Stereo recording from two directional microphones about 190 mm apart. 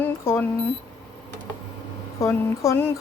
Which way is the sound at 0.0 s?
10° left (ahead or behind).